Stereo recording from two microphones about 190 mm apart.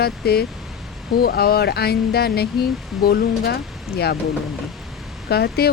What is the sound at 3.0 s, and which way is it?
Speech, 55° left (ahead or behind).